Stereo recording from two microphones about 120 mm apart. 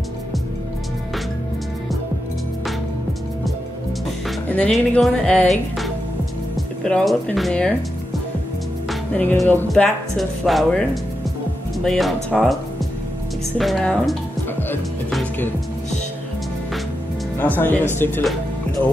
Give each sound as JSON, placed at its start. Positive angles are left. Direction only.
{"t": 4.6, "sound": "speech", "side_deg": 5}
{"t": 6.8, "sound": "speech", "side_deg": 5}
{"t": 8.8, "sound": "music", "side_deg": 10}
{"t": 9.5, "sound": "speech", "side_deg": 15}
{"t": 10.1, "sound": "speech", "side_deg": 0}
{"t": 13.6, "sound": "speech", "side_deg": 0}
{"t": 17.4, "sound": "speech", "side_deg": 15}